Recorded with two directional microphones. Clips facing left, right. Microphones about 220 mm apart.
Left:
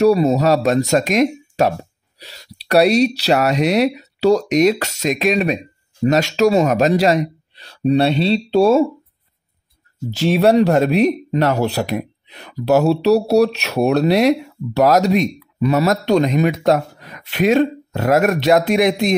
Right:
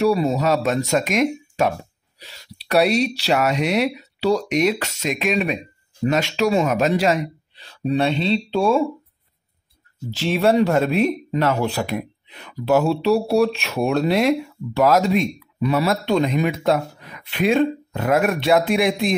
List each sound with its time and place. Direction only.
0.0 s speech: 40° left (ahead or behind)
10.1 s speech: 40° left (ahead or behind)